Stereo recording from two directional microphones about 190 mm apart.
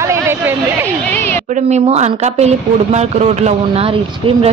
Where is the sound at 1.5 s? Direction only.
35° right (ahead or behind).